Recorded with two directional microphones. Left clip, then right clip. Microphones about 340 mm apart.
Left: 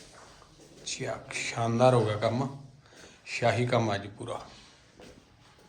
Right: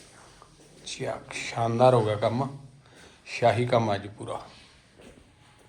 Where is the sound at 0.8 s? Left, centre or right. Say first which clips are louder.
Right 2 dB; centre.